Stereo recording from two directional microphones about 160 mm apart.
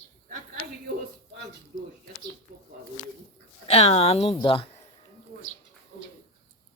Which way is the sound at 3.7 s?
40° left (ahead or behind).